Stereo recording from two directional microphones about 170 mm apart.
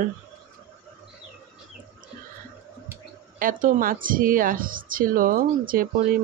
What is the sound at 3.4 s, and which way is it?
Speech, 55° right (ahead or behind).